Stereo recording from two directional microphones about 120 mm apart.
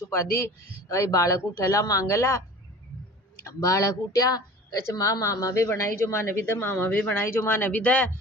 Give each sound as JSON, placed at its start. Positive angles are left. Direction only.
{"t": 0.1, "sound": "speech", "side_deg": 20}
{"t": 3.4, "sound": "speech", "side_deg": 25}